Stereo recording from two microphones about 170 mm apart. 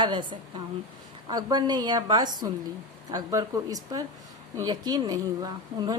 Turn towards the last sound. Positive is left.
turn(degrees=-20)  # may be behind; listen again after turning